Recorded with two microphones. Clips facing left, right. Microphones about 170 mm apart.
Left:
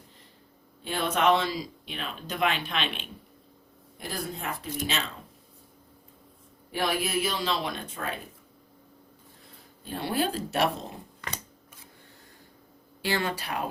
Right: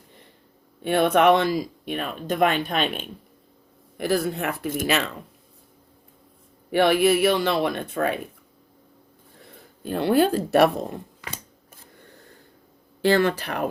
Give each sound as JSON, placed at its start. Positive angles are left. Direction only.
{"t": 0.8, "sound": "speech", "side_deg": -60}
{"t": 3.9, "sound": "speech", "side_deg": -70}
{"t": 6.7, "sound": "speech", "side_deg": -65}
{"t": 10.3, "sound": "speech", "side_deg": -60}
{"t": 13.0, "sound": "speech", "side_deg": -55}